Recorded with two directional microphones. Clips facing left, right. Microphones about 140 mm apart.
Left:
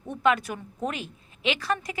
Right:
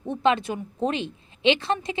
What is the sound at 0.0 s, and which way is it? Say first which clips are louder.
A woman's voice: right 2 dB; 25° right (ahead or behind).